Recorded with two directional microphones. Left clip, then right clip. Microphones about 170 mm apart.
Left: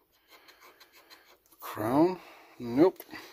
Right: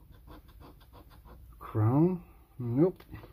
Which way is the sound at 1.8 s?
45° left (ahead or behind).